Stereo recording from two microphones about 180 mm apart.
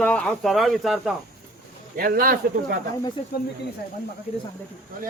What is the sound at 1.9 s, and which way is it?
Speech, 55° right (ahead or behind).